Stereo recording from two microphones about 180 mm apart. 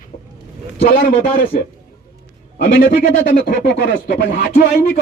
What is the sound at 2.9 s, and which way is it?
Speech, 50° left (ahead or behind).